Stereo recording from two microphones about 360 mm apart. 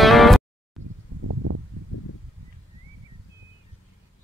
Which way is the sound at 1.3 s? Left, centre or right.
Right.